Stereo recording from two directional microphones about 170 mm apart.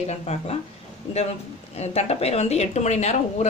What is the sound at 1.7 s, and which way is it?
Speech, 40° left (ahead or behind).